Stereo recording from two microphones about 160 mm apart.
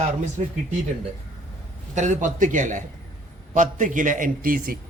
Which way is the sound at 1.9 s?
50° right (ahead or behind).